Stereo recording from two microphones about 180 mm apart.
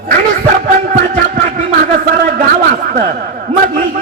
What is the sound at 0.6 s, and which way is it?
A man's voice, 50° right (ahead or behind).